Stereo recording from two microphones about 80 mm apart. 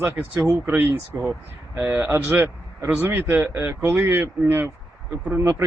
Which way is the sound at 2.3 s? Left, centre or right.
Right.